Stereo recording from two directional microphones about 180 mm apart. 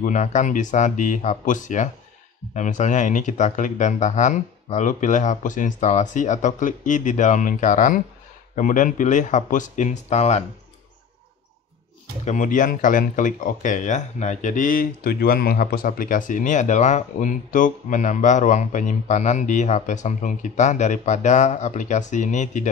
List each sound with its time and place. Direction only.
0.0 s speech: 45° left (ahead or behind)
12.3 s speech: 45° left (ahead or behind)